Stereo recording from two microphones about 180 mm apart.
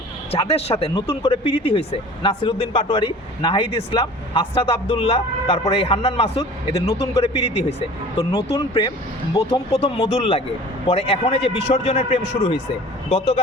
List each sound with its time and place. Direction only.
0.3 s speech: 35° left (ahead or behind)
8.2 s speech: 20° left (ahead or behind)
9.7 s speech: 35° left (ahead or behind)